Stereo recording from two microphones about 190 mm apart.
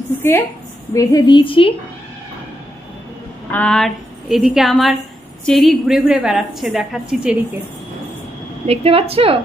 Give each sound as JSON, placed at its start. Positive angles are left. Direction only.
{"t": 0.9, "sound": "a woman's voice", "side_deg": 20}
{"t": 3.5, "sound": "a woman's voice", "side_deg": 5}
{"t": 8.6, "sound": "a woman's voice", "side_deg": -30}